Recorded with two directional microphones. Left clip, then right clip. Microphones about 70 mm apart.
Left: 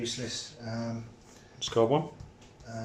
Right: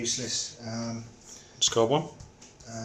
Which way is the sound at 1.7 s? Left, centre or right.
Centre.